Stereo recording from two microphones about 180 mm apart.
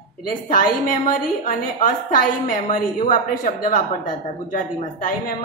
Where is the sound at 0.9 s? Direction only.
45° left (ahead or behind).